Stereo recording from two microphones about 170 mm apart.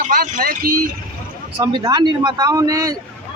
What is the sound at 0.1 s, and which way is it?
Speech, 60° right (ahead or behind).